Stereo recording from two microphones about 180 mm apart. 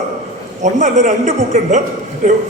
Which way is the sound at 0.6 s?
40° right (ahead or behind).